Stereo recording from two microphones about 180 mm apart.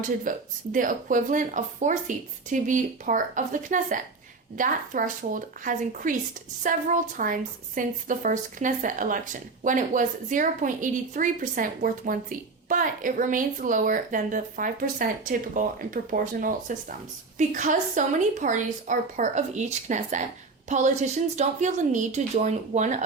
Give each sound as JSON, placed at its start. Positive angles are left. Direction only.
{"t": 0.3, "sound": "a woman's voice", "side_deg": -50}